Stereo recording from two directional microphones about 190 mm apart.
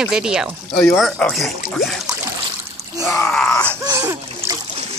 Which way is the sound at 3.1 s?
10° left (ahead or behind).